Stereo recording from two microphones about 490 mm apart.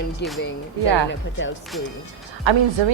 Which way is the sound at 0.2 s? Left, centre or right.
Left.